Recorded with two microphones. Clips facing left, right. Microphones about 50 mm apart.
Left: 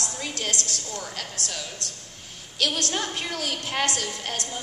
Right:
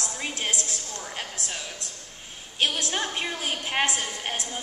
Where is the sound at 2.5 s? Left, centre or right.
Right.